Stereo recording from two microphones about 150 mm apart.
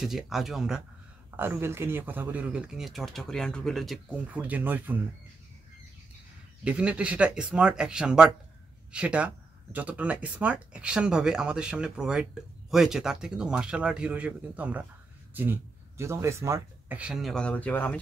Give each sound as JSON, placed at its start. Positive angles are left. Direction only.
{"t": 0.0, "sound": "speech", "side_deg": 0}
{"t": 1.3, "sound": "speech", "side_deg": -15}
{"t": 4.1, "sound": "speech", "side_deg": -10}
{"t": 6.6, "sound": "speech", "side_deg": -10}
{"t": 17.0, "sound": "speech", "side_deg": 0}